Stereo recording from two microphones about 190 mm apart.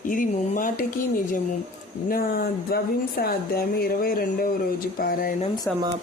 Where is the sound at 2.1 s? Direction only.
50° left (ahead or behind).